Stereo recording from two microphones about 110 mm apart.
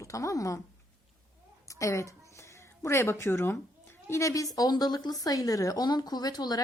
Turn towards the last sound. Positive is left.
turn(degrees=35)  # may be behind; listen again after turning